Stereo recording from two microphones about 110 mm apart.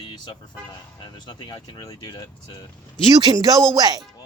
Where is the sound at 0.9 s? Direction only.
40° left (ahead or behind).